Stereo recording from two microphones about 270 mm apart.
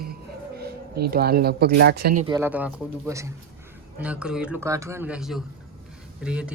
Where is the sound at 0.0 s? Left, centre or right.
Right.